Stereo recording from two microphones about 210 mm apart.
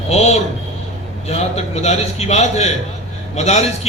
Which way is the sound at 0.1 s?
30° left (ahead or behind).